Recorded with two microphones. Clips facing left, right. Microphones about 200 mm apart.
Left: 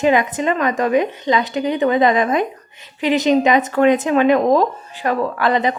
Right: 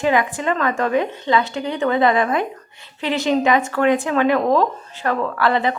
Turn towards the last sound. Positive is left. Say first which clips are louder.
# left 1 dB
turn(degrees=20)  # may be behind; listen again after turning